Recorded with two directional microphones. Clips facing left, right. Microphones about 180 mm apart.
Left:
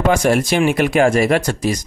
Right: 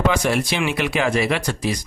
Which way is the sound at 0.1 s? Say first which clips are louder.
Left 6 dB; 45° left (ahead or behind).